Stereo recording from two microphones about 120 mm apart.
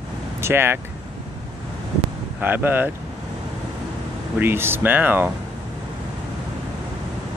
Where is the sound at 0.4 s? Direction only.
20° right (ahead or behind).